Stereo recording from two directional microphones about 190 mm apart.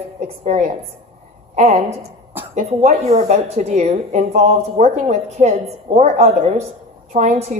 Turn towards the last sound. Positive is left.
turn(degrees=-40)  # may be behind; listen again after turning